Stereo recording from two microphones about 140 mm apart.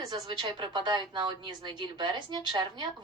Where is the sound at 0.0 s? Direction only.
30° right (ahead or behind).